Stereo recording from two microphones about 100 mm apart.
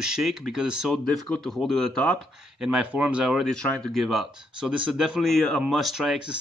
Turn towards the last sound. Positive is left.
turn(degrees=-5)  # may be behind; listen again after turning